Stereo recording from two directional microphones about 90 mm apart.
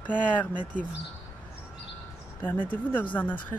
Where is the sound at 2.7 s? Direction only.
20° left (ahead or behind).